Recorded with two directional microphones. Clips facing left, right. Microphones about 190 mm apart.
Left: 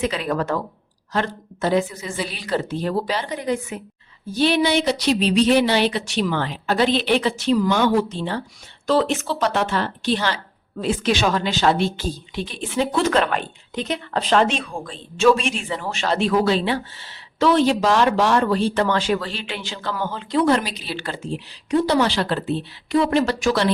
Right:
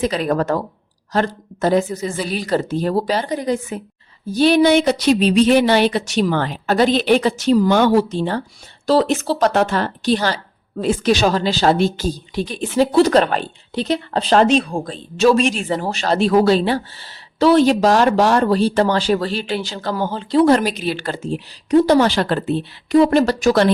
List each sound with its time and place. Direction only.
0.0 s speech: 40° right (ahead or behind)